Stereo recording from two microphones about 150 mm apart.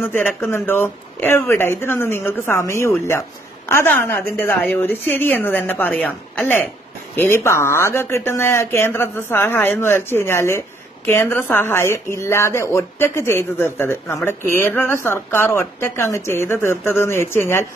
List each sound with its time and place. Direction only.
0.0 s a woman's voice: 15° left (ahead or behind)